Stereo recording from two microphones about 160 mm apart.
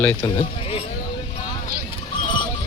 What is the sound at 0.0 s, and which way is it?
Speech, 10° left (ahead or behind).